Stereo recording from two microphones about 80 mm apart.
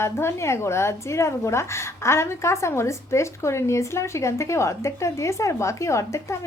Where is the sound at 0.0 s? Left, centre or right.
Left.